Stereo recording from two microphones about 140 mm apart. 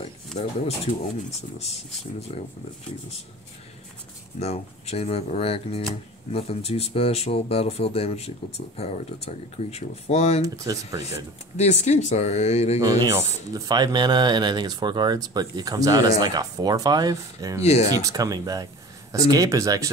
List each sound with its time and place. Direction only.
0.3 s speech: 50° left (ahead or behind)
1.6 s speech: 50° left (ahead or behind)
4.4 s speech: 50° left (ahead or behind)
10.4 s speech: 25° right (ahead or behind)
11.5 s speech: 50° left (ahead or behind)
12.8 s speech: 25° right (ahead or behind)